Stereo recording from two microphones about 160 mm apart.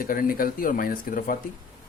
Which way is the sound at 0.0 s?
60° left (ahead or behind).